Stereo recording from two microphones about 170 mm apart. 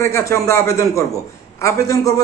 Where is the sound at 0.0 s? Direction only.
15° left (ahead or behind).